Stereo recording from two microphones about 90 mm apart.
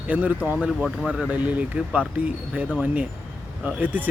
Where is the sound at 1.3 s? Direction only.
15° right (ahead or behind).